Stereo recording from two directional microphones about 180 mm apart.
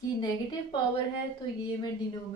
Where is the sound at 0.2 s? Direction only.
25° left (ahead or behind).